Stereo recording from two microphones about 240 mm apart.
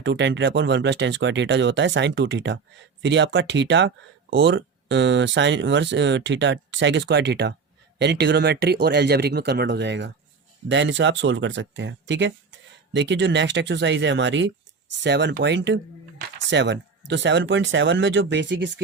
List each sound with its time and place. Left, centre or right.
0.0 s speech: right